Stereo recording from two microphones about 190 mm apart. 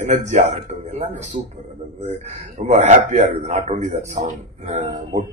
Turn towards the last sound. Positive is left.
turn(degrees=-35)  # may be behind; listen again after turning